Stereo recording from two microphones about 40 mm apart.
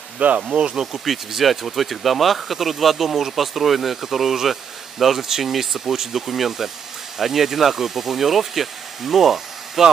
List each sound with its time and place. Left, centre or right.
0.4 s insect: right
0.7 s speech: centre